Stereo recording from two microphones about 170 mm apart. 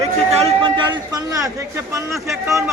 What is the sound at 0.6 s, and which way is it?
A man's voice, 30° right (ahead or behind).